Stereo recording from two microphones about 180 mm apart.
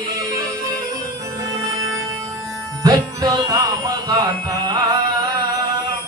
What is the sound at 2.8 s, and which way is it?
Music, 20° right (ahead or behind).